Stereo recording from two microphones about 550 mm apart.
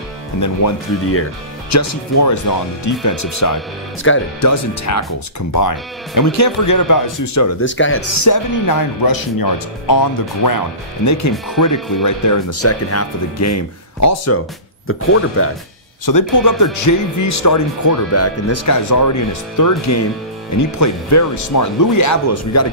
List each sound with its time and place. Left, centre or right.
0.4 s speech: left
6.3 s speech: left
7.6 s speech: left
8.3 s speech: left
16.1 s speech: left